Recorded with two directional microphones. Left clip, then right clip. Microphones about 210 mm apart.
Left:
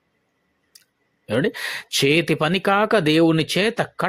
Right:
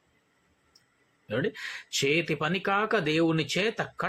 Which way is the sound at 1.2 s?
45° left (ahead or behind).